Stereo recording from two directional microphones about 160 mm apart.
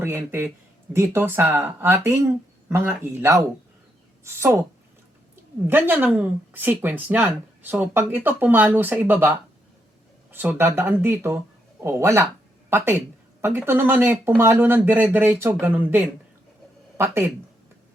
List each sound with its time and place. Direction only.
0.0 s a woman's voice: 15° right (ahead or behind)
5.6 s speech: 10° right (ahead or behind)